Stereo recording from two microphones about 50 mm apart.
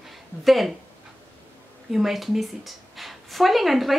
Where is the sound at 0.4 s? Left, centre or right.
Centre.